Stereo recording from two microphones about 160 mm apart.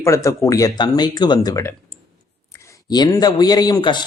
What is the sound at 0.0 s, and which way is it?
Speech, 20° left (ahead or behind).